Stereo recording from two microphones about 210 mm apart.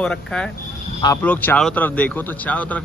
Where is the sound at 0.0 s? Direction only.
5° left (ahead or behind).